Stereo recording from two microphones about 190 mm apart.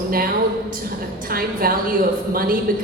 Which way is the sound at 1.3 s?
50° right (ahead or behind).